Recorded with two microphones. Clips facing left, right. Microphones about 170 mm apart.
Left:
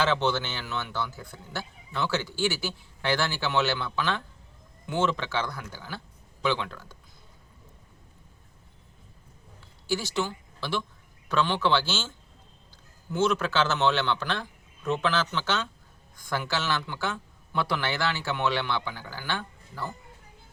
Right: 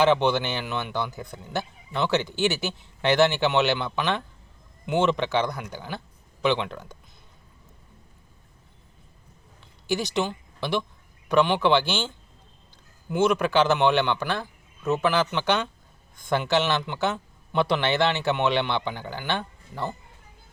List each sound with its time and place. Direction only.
0.0 s speech: 15° right (ahead or behind)
9.6 s a sound: 20° right (ahead or behind)
11.3 s a man's voice: 15° right (ahead or behind)